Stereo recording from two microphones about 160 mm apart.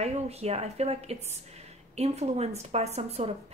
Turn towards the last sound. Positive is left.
turn(degrees=-40)  # may be behind; listen again after turning